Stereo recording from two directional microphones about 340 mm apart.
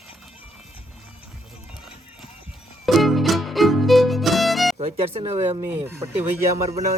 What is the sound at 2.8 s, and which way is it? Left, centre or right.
Music, centre.